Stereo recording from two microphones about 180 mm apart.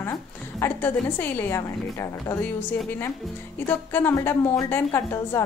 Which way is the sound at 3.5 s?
10° left (ahead or behind).